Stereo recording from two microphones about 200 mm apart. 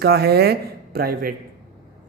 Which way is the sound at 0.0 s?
55° right (ahead or behind).